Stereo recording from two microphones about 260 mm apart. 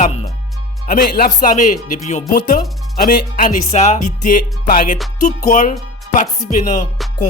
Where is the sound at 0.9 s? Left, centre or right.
Left.